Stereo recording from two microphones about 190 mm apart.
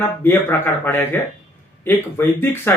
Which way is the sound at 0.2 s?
10° left (ahead or behind).